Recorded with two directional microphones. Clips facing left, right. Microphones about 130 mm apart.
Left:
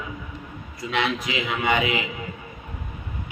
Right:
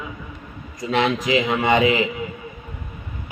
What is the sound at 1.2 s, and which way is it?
Speech, 35° right (ahead or behind).